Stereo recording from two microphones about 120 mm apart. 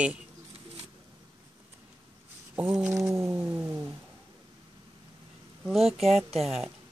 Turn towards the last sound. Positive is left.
turn(degrees=0)  # may be behind; listen again after turning